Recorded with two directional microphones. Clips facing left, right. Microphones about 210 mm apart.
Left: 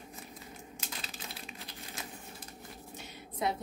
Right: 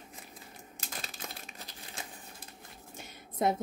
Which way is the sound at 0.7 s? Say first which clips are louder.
Right 3 dB; 45° right (ahead or behind).